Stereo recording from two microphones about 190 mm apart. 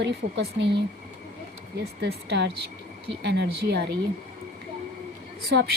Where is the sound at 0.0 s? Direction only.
65° right (ahead or behind).